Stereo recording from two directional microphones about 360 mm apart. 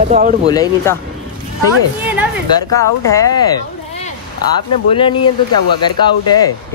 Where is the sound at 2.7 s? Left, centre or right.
Centre.